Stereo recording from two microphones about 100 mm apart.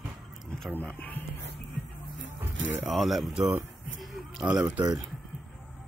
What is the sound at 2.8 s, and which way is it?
Speech, centre (ahead or behind).